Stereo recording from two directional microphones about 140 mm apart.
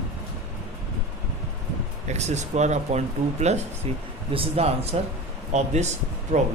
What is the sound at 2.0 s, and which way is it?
A man's voice, 55° right (ahead or behind).